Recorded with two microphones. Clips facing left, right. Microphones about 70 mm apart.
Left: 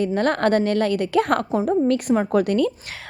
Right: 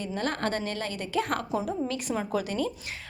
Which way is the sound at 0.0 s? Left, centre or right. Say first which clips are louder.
Left 10 dB; left.